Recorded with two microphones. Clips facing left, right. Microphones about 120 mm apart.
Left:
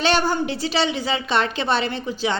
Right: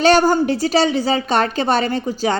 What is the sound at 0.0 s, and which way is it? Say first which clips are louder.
A woman's voice: right 7 dB; 40° right (ahead or behind).